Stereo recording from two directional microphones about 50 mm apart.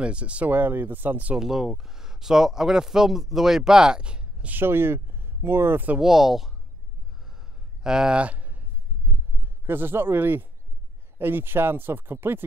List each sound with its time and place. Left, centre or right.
0.0 s speech: right
0.5 s speech: right
1.4 s speech: centre
4.5 s speech: right
5.9 s speech: centre
7.8 s speech: centre
8.2 s a sound: right
9.4 s a man's voice: right